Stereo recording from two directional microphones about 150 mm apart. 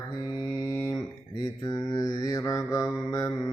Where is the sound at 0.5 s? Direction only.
20° left (ahead or behind).